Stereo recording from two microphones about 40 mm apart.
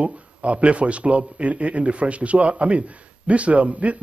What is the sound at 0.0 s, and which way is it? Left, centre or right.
A man's voice, right.